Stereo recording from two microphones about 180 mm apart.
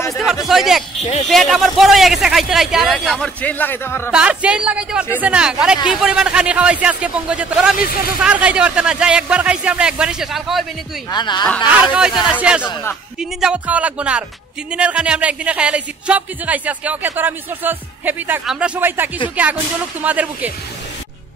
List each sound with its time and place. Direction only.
0.5 s a man's voice: centre (ahead or behind)
4.1 s a man's voice: 5° right (ahead or behind)
11.1 s speech: 25° left (ahead or behind)
11.7 s a man's voice: 10° right (ahead or behind)